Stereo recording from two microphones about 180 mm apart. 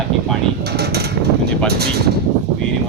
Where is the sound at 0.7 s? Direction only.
65° right (ahead or behind).